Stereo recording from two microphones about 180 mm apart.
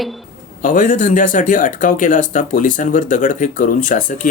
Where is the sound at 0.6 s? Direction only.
45° left (ahead or behind).